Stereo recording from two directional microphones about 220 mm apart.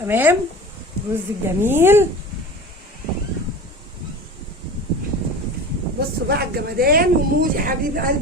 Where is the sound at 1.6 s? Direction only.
10° right (ahead or behind).